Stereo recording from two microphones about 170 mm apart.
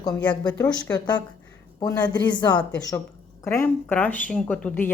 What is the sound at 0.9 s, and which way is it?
A woman's voice, 25° left (ahead or behind).